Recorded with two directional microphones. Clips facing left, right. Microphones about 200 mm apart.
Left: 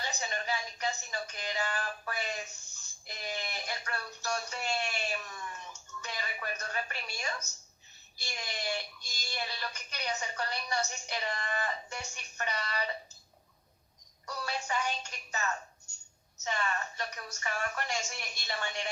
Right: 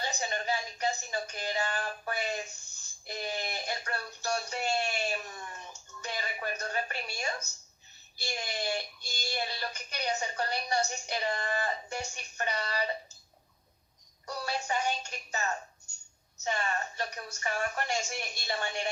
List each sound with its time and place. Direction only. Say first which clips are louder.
0.0 s speech: right 3 dB; 35° right (ahead or behind)
14.3 s speech: right 2 dB; 30° right (ahead or behind)